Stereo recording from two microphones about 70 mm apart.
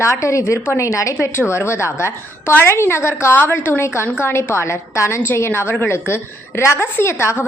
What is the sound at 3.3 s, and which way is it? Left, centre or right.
A woman's voice, left.